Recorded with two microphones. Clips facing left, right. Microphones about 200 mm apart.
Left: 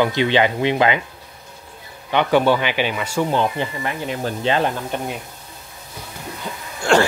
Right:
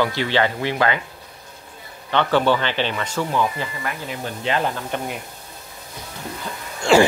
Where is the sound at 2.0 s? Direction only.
15° left (ahead or behind).